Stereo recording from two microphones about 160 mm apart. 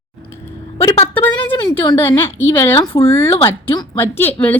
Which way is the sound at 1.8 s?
30° left (ahead or behind).